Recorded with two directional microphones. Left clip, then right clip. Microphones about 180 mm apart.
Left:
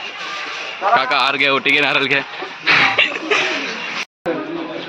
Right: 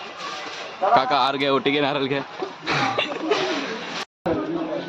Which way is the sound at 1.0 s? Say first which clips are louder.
Left 5 dB; 20° right (ahead or behind).